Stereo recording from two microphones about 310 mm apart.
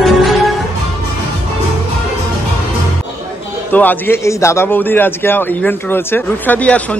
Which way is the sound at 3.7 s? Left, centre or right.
Centre.